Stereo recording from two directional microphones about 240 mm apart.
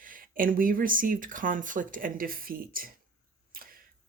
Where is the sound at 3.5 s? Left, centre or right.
Right.